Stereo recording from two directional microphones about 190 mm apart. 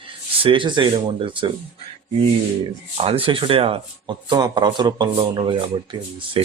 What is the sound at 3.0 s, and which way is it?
Speech, 30° right (ahead or behind).